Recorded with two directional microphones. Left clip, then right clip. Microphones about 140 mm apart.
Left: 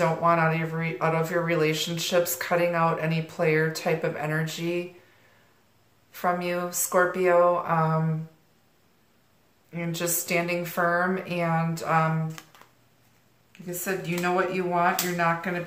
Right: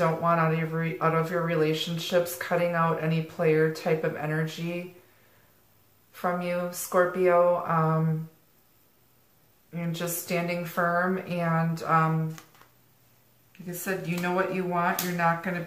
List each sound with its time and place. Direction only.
0.0 s speech: 20° left (ahead or behind)
6.2 s speech: 20° left (ahead or behind)
9.7 s speech: 20° left (ahead or behind)
13.5 s speech: 15° left (ahead or behind)